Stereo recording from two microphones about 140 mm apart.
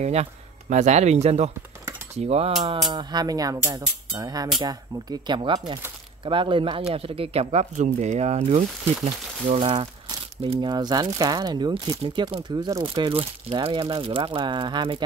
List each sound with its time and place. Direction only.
0.0 s speech: 50° right (ahead or behind)
2.9 s speech: 30° right (ahead or behind); by 9.7 s 50° right (ahead or behind)
9.7 s speech: 35° right (ahead or behind)